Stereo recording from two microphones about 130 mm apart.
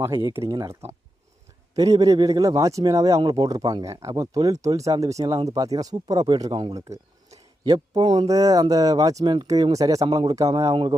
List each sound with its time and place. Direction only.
0.0 s speech: 20° right (ahead or behind)